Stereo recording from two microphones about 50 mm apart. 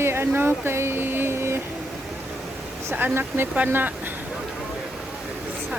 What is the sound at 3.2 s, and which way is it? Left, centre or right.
Speech, right.